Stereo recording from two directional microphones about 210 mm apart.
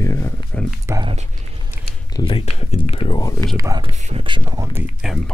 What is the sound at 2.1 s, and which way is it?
Speech, 25° left (ahead or behind).